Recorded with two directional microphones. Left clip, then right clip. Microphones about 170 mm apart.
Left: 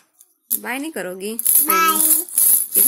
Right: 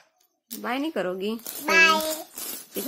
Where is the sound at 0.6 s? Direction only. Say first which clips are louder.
Left 1 dB; 10° right (ahead or behind).